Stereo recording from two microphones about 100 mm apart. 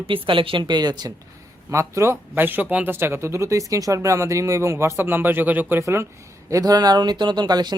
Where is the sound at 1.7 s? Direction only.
30° right (ahead or behind).